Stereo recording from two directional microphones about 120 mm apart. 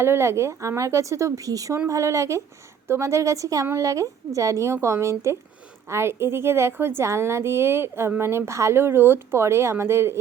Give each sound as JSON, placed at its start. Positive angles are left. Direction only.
{"t": 0.0, "sound": "a woman's voice", "side_deg": -20}